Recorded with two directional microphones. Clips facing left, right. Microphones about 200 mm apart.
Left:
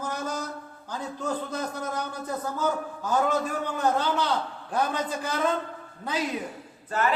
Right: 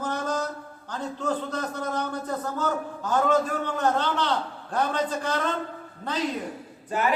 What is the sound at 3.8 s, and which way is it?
A man's voice, 10° left (ahead or behind).